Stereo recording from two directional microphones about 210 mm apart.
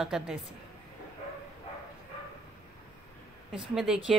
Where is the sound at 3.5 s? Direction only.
Centre (ahead or behind).